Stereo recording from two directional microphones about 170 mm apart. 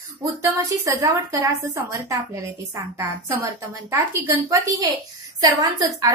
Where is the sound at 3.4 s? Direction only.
15° right (ahead or behind).